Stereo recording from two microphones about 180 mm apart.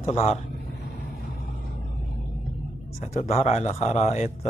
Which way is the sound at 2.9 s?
40° left (ahead or behind).